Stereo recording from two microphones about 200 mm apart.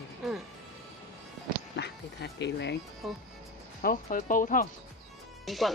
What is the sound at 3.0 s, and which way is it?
Speech, centre (ahead or behind).